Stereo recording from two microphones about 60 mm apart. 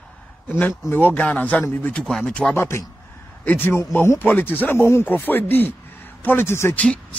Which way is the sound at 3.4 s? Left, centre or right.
Left.